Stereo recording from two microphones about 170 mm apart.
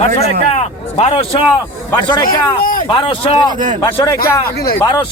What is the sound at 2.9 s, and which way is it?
Speech, 30° left (ahead or behind).